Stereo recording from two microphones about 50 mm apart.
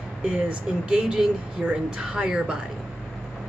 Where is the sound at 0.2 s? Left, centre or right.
Centre.